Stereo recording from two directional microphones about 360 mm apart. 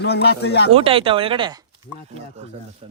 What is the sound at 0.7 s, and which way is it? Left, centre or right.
Speech, centre.